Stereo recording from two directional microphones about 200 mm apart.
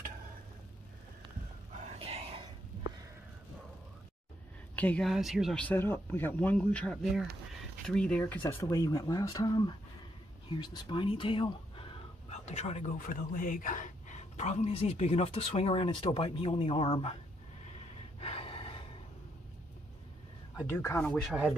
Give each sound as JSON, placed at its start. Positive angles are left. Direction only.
{"t": 2.0, "sound": "whispering", "side_deg": -30}
{"t": 4.7, "sound": "speech", "side_deg": 5}
{"t": 17.6, "sound": "gasp", "side_deg": 35}
{"t": 20.8, "sound": "speech", "side_deg": 15}
{"t": 21.1, "sound": "speech", "side_deg": -5}